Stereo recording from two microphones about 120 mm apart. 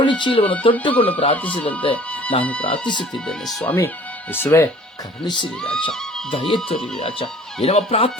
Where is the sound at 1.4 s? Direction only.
10° left (ahead or behind).